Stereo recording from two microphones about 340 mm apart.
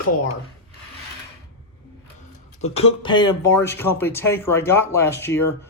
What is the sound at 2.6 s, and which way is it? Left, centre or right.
Speech, centre.